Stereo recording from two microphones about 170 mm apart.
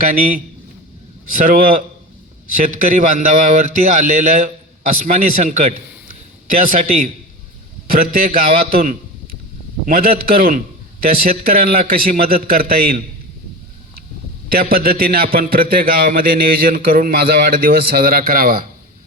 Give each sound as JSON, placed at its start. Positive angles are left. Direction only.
{"t": 0.0, "sound": "a man's voice", "side_deg": -55}
{"t": 2.9, "sound": "a man's voice", "side_deg": -50}
{"t": 14.5, "sound": "a man's voice", "side_deg": -60}